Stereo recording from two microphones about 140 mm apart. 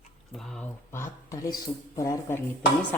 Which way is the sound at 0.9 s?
20° left (ahead or behind).